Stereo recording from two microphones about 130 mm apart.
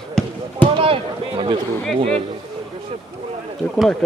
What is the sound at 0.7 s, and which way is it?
Speech, 45° right (ahead or behind).